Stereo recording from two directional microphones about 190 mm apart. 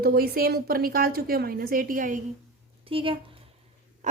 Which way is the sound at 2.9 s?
30° right (ahead or behind).